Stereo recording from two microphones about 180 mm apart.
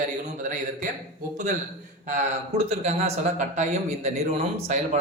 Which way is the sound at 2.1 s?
40° right (ahead or behind).